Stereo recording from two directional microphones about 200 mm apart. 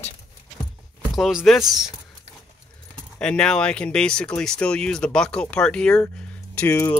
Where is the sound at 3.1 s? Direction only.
5° left (ahead or behind).